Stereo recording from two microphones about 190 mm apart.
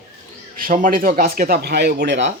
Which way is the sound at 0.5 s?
45° right (ahead or behind).